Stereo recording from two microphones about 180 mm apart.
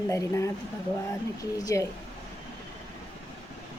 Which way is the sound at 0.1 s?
15° left (ahead or behind).